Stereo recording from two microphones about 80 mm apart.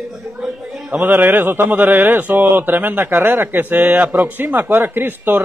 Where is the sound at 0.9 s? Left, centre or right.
Right.